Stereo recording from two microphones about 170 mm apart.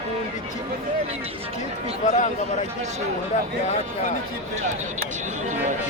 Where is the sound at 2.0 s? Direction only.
45° left (ahead or behind).